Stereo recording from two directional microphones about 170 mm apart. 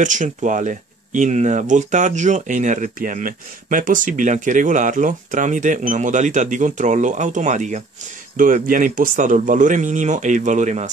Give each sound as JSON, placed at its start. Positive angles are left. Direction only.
{"t": 0.0, "sound": "speech", "side_deg": -50}